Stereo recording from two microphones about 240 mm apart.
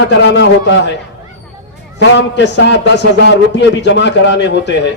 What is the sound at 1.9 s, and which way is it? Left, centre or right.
A man's voice, left.